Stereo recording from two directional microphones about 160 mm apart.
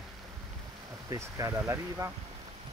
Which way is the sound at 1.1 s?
20° right (ahead or behind).